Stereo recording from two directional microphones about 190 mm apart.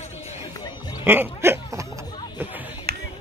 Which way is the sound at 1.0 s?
10° right (ahead or behind).